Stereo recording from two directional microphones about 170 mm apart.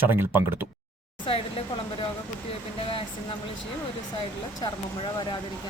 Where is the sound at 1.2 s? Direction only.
30° left (ahead or behind).